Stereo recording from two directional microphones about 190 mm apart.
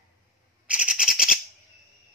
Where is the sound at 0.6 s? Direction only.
5° right (ahead or behind).